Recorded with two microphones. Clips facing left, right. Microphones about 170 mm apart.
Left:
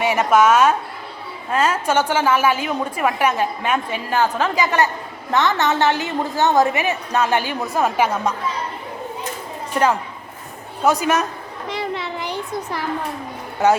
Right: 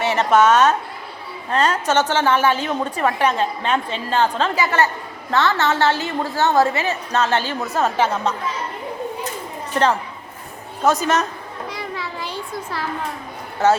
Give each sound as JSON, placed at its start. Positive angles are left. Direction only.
{"t": 0.0, "sound": "a woman's voice", "side_deg": 10}
{"t": 10.8, "sound": "a woman's voice", "side_deg": 10}
{"t": 11.7, "sound": "a sound", "side_deg": 25}